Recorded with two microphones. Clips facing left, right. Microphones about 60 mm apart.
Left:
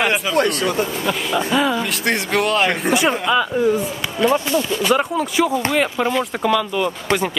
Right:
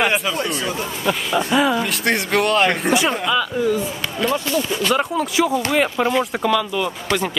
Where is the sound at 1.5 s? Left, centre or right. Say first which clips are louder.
Right 2 dB; centre.